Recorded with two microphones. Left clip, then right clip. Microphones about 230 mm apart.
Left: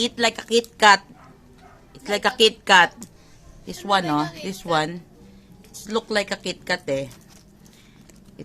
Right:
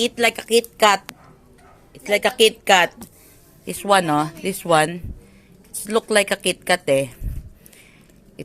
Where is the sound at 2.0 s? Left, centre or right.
Centre.